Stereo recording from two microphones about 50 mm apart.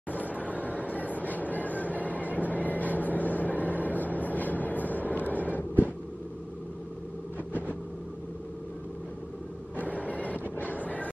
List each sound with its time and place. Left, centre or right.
0.3 s vehicle: left
9.8 s a sound: left
10.6 s vehicle: left